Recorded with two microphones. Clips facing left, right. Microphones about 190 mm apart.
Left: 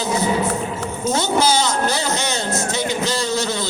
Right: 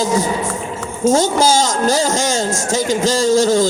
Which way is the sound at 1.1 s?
40° right (ahead or behind).